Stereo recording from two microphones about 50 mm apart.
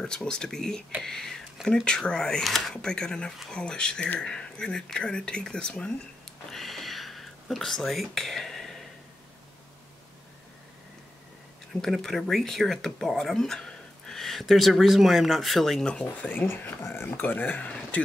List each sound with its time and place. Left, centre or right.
0.0 s speech: centre
1.7 s speech: centre
6.5 s a sound: centre
11.8 s speech: centre
15.8 s speech: left
16.3 s speech: left
17.2 s speech: left